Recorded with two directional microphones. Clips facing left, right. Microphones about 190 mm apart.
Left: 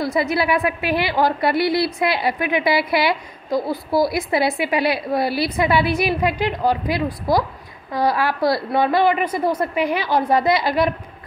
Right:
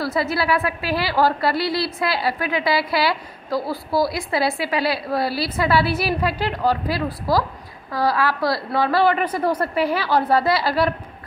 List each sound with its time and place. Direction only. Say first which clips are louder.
0.0 s a woman's voice: left 2 dB; 15° left (ahead or behind)